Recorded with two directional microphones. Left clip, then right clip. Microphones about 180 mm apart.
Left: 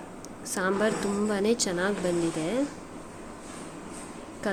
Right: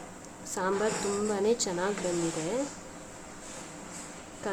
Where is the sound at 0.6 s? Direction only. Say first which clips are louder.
Left 3 dB; 20° left (ahead or behind).